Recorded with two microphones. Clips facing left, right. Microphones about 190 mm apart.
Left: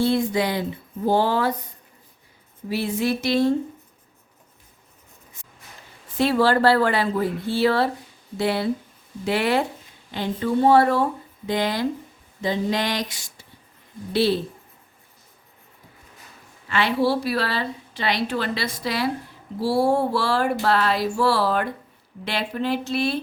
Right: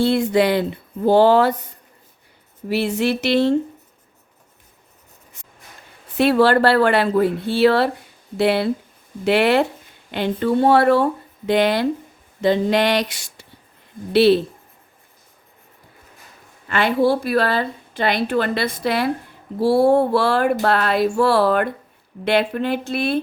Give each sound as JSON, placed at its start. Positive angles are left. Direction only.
{"t": 0.0, "sound": "speech", "side_deg": -70}
{"t": 2.6, "sound": "speech", "side_deg": -75}
{"t": 6.1, "sound": "speech", "side_deg": -65}
{"t": 16.6, "sound": "a woman's voice", "side_deg": -50}